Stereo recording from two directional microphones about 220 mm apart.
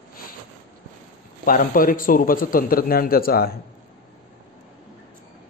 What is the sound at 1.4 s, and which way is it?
A man's voice, 40° left (ahead or behind).